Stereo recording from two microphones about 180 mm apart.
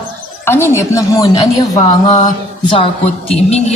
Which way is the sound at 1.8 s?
40° left (ahead or behind).